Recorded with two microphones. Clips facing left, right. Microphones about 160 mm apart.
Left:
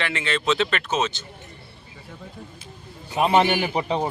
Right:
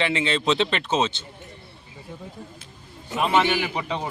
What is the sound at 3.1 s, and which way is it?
Speech, 35° left (ahead or behind).